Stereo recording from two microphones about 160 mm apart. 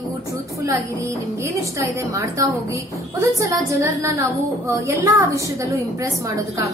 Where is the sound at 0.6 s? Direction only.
20° right (ahead or behind).